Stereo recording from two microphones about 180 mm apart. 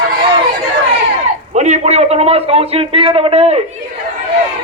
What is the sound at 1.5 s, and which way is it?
A man's voice, 40° right (ahead or behind).